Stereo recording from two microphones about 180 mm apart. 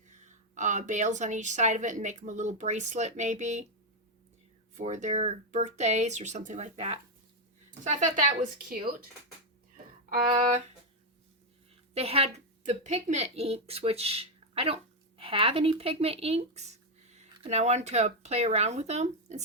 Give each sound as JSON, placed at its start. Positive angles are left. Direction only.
{"t": 0.1, "sound": "a woman's voice", "side_deg": -40}
{"t": 4.7, "sound": "a woman's voice", "side_deg": -45}
{"t": 11.9, "sound": "a woman's voice", "side_deg": -35}